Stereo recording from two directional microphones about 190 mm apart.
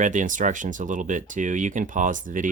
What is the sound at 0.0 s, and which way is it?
Speech, 40° right (ahead or behind).